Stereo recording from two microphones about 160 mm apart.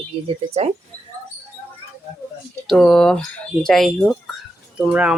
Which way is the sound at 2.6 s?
Centre (ahead or behind).